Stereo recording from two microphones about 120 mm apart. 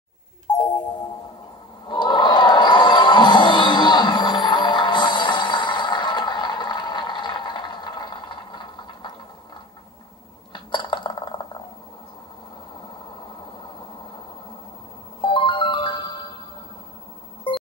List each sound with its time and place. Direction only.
1.9 s music: 40° left (ahead or behind)
10.5 s a sound: 40° left (ahead or behind)
15.2 s music: 40° left (ahead or behind)